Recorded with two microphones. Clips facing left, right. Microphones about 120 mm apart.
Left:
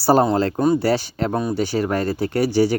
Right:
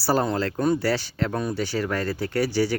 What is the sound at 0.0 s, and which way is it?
Speech, 20° left (ahead or behind).